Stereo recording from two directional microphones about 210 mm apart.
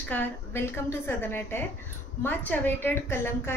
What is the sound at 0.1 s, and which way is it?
A woman's voice, 10° left (ahead or behind).